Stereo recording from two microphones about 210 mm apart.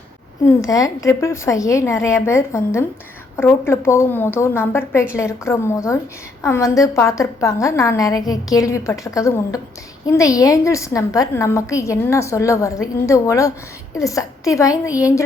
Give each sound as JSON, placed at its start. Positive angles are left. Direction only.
{"t": 0.4, "sound": "a woman's voice", "side_deg": 15}